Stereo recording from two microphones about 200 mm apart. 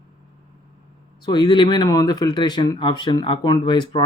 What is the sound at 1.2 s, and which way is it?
Speech, 20° left (ahead or behind).